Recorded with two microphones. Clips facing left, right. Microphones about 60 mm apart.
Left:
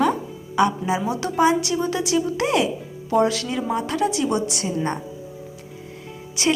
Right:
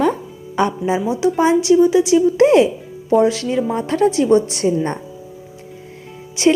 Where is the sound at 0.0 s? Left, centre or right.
Right.